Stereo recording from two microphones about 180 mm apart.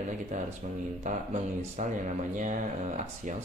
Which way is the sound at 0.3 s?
45° right (ahead or behind).